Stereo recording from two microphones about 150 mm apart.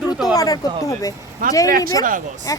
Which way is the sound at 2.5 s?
25° left (ahead or behind).